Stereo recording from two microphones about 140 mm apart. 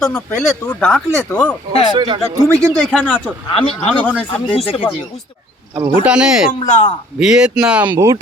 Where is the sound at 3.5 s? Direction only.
40° left (ahead or behind).